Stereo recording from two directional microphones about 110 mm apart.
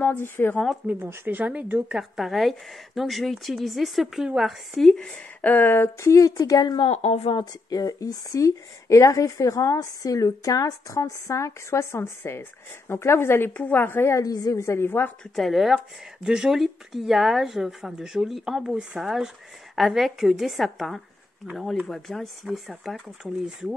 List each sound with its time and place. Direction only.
0.0 s a woman's voice: 20° left (ahead or behind)
0.8 s speech: 15° right (ahead or behind)
2.0 s a woman's voice: centre (ahead or behind); by 6.9 s 40° left (ahead or behind)
6.9 s speech: 75° left (ahead or behind)
7.2 s a woman's voice: 40° left (ahead or behind); by 15.1 s 20° left (ahead or behind)
15.3 s speech: centre (ahead or behind)